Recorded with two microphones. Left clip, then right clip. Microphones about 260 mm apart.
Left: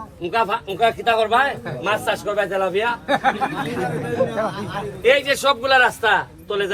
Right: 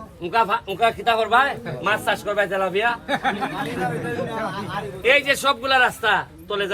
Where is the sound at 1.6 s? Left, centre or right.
Left.